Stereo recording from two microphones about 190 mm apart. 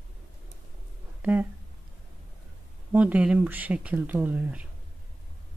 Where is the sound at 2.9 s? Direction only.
5° right (ahead or behind).